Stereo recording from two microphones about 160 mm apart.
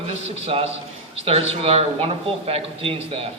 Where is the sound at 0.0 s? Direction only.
40° right (ahead or behind).